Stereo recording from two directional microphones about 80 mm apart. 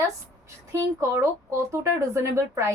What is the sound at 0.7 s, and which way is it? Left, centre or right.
Speech, right.